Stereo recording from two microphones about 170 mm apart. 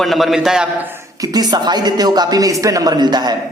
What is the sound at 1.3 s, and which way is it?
Speech, 25° right (ahead or behind).